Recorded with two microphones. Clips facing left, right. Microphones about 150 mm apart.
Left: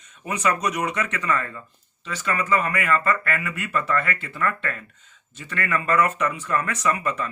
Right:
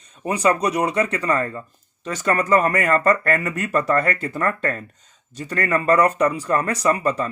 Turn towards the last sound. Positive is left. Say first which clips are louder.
# right 5 dB
turn(degrees=-35)  # may be behind; listen again after turning